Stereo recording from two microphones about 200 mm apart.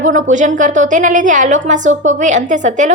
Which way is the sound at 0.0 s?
40° right (ahead or behind).